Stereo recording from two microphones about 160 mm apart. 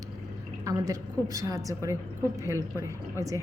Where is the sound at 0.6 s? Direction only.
20° right (ahead or behind).